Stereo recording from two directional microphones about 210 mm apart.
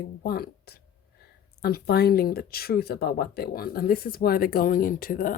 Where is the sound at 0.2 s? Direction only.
45° left (ahead or behind).